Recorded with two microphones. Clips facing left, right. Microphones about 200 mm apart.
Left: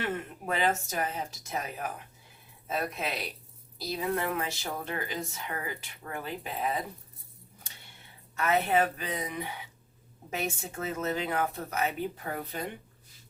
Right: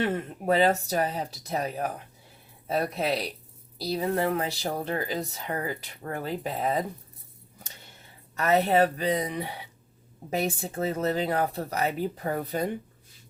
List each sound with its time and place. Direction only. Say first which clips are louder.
0.0 s a woman's voice: right 6 dB; 35° right (ahead or behind)
8.4 s a woman's voice: right 4 dB; 35° right (ahead or behind)